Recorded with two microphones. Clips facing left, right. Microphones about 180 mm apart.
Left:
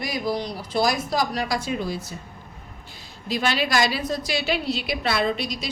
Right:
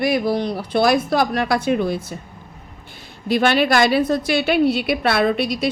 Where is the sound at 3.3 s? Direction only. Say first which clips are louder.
Right 7 dB; 55° right (ahead or behind).